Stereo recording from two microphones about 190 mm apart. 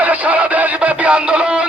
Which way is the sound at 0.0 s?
10° right (ahead or behind).